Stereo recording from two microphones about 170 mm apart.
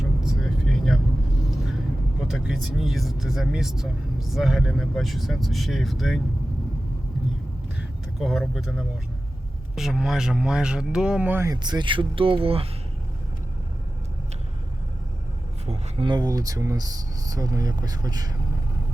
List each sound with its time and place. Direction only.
0.0 s vehicle: centre (ahead or behind)
2.2 s speech: centre (ahead or behind)
8.2 s speech: centre (ahead or behind); by 12.6 s 35° right (ahead or behind)
15.6 s speech: 40° right (ahead or behind)
16.0 s speech: 25° right (ahead or behind)